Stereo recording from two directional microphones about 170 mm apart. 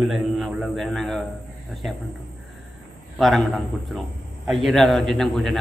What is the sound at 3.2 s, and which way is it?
Speech, centre (ahead or behind).